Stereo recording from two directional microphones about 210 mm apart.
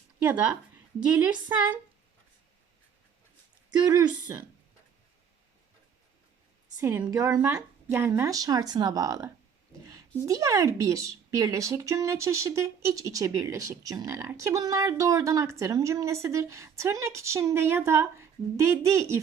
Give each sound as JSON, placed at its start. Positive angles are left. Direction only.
{"t": 0.2, "sound": "speech", "side_deg": -5}
{"t": 3.7, "sound": "speech", "side_deg": -20}
{"t": 6.7, "sound": "speech", "side_deg": -15}